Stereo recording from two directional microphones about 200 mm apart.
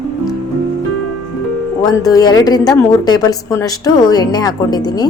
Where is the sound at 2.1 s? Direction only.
20° left (ahead or behind).